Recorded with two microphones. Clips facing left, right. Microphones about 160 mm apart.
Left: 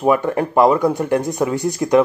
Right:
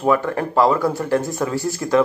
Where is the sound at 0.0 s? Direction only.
20° left (ahead or behind).